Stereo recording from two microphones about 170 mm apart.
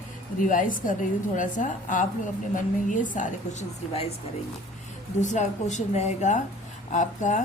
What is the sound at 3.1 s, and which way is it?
Speech, 45° left (ahead or behind).